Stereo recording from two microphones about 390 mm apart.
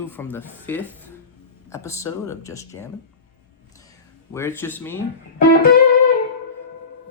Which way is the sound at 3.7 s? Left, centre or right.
Centre.